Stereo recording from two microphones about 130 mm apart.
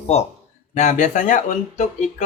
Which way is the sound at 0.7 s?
70° left (ahead or behind).